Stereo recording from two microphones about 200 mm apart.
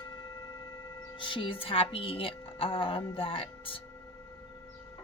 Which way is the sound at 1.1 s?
25° left (ahead or behind).